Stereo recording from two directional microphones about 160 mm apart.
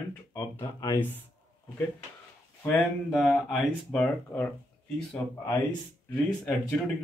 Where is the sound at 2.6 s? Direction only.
Centre (ahead or behind).